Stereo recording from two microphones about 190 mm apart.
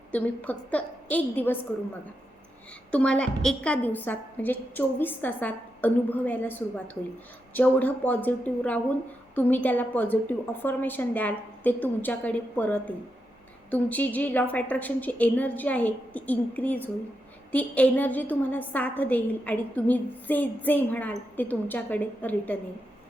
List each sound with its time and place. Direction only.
0.1 s a woman's voice: 10° left (ahead or behind)
2.9 s a woman's voice: 5° left (ahead or behind)